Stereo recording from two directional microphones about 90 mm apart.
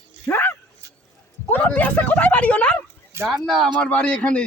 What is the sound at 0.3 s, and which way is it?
Dog, 25° left (ahead or behind).